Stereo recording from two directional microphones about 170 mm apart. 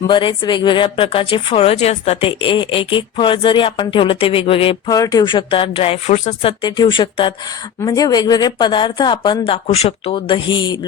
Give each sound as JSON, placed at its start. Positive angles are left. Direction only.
{"t": 0.1, "sound": "speech", "side_deg": 30}
{"t": 6.6, "sound": "speech", "side_deg": 25}